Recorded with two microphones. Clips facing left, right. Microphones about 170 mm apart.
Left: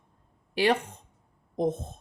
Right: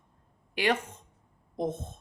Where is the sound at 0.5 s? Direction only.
35° left (ahead or behind).